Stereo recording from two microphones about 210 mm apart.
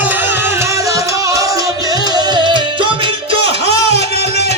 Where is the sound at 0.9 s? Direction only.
15° right (ahead or behind).